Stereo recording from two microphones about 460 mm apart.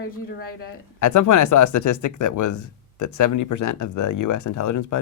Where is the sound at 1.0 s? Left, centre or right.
Left.